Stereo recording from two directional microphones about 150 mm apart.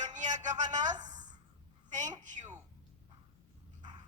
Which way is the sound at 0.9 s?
30° right (ahead or behind).